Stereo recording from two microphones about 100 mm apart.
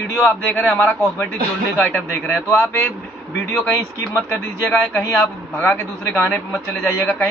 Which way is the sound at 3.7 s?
25° left (ahead or behind).